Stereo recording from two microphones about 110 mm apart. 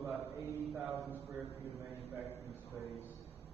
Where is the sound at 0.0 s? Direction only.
20° right (ahead or behind).